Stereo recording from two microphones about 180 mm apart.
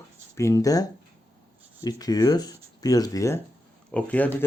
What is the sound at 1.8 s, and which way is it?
Speech, 20° left (ahead or behind).